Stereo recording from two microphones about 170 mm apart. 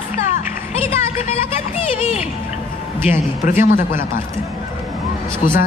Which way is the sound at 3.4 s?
50° left (ahead or behind).